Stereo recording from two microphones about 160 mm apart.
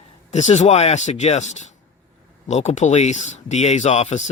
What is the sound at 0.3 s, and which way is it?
Speech, 45° left (ahead or behind).